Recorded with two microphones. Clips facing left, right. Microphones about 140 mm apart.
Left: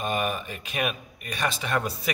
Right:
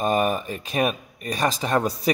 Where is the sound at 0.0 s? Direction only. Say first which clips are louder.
Right 6 dB; 35° right (ahead or behind).